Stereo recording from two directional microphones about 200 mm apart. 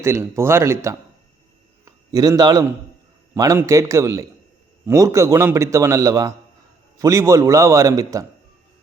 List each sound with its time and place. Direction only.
0.0 s a man's voice: 15° right (ahead or behind)